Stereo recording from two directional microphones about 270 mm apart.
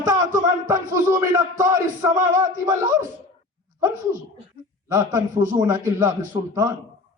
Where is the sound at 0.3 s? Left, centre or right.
Right.